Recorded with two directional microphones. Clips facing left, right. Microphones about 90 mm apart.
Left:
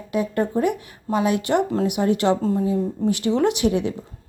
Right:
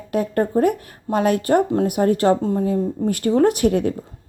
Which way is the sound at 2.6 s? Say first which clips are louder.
Right 1 dB; 50° right (ahead or behind).